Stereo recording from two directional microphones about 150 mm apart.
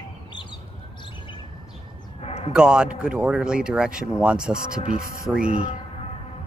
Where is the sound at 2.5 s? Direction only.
5° right (ahead or behind).